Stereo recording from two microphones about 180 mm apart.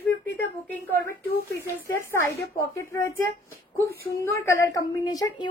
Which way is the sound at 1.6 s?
15° left (ahead or behind).